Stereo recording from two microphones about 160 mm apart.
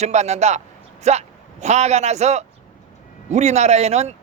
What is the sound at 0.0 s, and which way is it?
Speech, 45° right (ahead or behind).